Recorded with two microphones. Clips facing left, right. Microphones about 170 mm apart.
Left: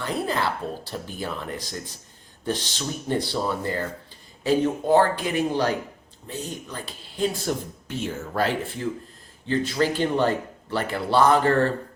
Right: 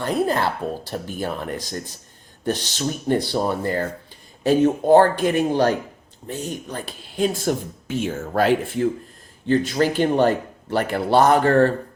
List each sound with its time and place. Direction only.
0.0 s speech: 50° right (ahead or behind)
2.7 s speech: 50° right (ahead or behind)